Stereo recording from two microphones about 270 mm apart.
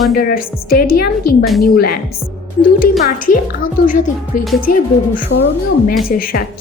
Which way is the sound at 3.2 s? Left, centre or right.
Left.